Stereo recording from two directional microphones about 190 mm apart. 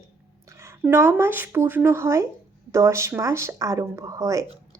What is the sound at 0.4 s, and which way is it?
A woman's voice, 15° right (ahead or behind).